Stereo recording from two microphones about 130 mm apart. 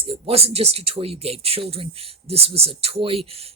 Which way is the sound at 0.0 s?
45° right (ahead or behind).